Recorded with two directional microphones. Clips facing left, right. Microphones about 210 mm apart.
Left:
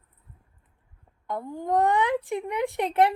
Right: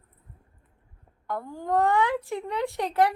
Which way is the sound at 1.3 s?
20° left (ahead or behind).